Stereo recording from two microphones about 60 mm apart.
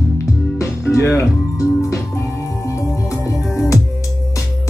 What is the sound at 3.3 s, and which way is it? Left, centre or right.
Music, centre.